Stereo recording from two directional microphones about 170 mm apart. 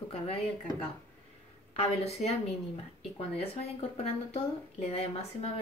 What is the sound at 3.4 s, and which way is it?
A woman's voice, 40° left (ahead or behind).